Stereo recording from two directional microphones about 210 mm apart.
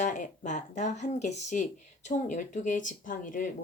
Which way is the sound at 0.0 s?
35° left (ahead or behind).